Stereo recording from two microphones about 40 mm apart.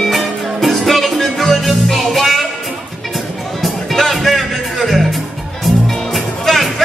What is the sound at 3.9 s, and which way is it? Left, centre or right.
Music, centre.